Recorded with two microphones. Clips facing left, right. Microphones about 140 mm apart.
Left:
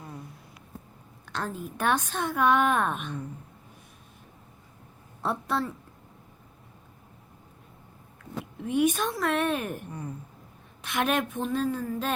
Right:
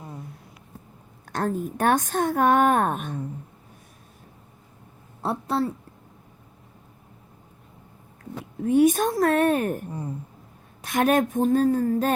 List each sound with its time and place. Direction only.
1.2 s a woman's voice: 50° right (ahead or behind)
5.2 s a woman's voice: 30° right (ahead or behind)
8.2 s speech: 40° right (ahead or behind)
9.9 s speech: 25° right (ahead or behind)
10.8 s a woman's voice: 45° right (ahead or behind)